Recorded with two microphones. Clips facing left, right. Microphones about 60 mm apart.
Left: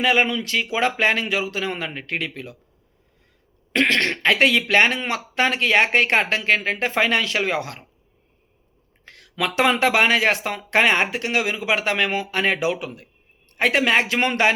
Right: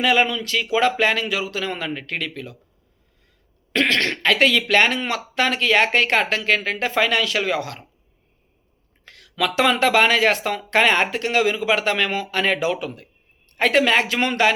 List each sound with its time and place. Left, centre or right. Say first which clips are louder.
0.0 s speech: right 1 dB; left
3.7 s speech: even; left
9.0 s speech: right 2 dB; left